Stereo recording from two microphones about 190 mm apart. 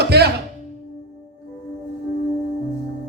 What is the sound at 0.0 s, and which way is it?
Music, 60° right (ahead or behind).